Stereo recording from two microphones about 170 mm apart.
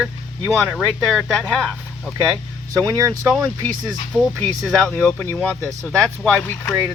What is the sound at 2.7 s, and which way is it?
Speech, 20° right (ahead or behind).